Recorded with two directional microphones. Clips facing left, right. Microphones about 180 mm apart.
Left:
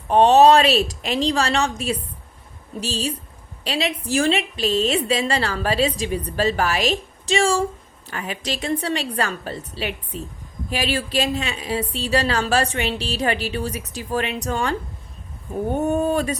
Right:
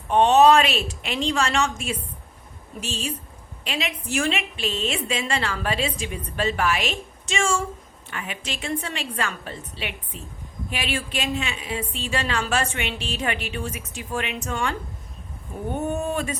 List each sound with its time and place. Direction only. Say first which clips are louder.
0.1 s a woman's voice: left 3 dB; 35° left (ahead or behind)
15.9 s a woman's voice: left 6 dB; 40° left (ahead or behind)